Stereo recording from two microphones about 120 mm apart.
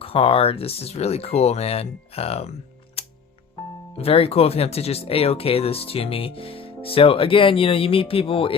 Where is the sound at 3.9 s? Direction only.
50° left (ahead or behind).